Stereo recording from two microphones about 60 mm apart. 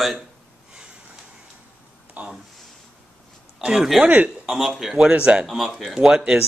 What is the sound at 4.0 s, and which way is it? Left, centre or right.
Speech, right.